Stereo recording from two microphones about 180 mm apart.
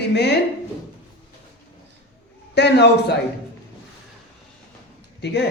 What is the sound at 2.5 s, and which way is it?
Speech, 70° left (ahead or behind).